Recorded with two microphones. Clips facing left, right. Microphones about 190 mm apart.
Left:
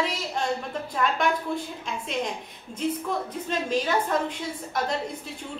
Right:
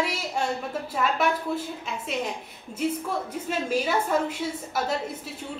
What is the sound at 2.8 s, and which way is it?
A woman's voice, 10° right (ahead or behind).